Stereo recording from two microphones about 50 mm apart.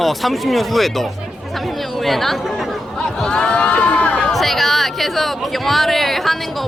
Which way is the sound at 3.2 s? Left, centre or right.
Centre.